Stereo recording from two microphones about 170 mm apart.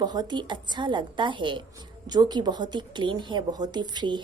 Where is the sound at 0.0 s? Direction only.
25° right (ahead or behind).